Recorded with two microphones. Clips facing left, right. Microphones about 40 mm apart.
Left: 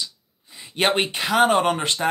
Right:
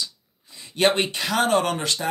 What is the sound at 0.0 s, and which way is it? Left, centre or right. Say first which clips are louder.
Speech: even; left.